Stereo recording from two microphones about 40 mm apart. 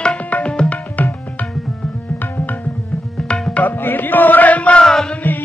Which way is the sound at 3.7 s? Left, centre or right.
Left.